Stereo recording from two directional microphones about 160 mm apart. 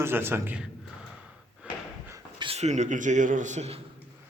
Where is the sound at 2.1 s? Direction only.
30° right (ahead or behind).